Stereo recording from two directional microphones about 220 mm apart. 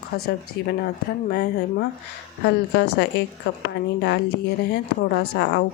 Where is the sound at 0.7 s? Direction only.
45° left (ahead or behind).